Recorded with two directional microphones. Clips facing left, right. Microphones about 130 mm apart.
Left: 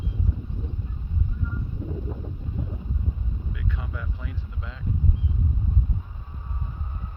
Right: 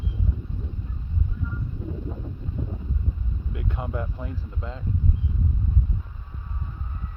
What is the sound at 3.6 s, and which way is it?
Speech, 50° right (ahead or behind).